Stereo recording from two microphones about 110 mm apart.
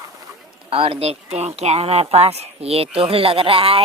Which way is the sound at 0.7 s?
60° right (ahead or behind).